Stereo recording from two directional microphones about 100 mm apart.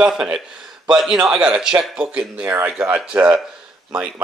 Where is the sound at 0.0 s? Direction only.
10° right (ahead or behind).